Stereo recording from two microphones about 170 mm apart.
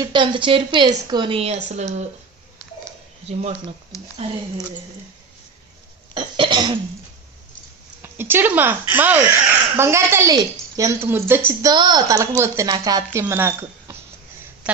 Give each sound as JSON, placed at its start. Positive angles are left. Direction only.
{"t": 0.0, "sound": "speech", "side_deg": -30}
{"t": 3.3, "sound": "speech", "side_deg": -40}
{"t": 6.1, "sound": "cough", "side_deg": -30}
{"t": 8.0, "sound": "a woman's voice", "side_deg": -15}
{"t": 11.7, "sound": "speech", "side_deg": -25}